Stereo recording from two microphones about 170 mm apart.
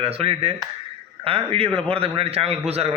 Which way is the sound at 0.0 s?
35° right (ahead or behind).